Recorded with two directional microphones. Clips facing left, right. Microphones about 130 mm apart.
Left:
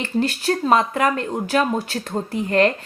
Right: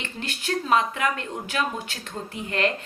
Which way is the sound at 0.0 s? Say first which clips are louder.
Left 12 dB; 35° left (ahead or behind).